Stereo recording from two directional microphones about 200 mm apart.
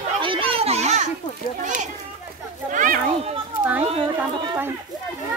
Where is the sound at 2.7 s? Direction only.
40° right (ahead or behind).